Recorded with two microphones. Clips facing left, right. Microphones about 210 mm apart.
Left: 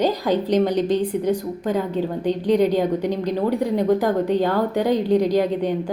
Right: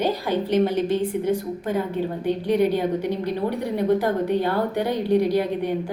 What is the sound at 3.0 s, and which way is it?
A woman's voice, 15° left (ahead or behind).